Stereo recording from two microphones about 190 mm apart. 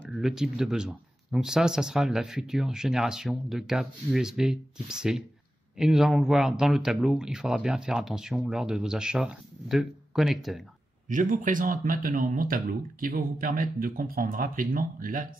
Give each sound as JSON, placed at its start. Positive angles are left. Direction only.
{"t": 0.2, "sound": "speech", "side_deg": 0}
{"t": 11.1, "sound": "speech", "side_deg": -45}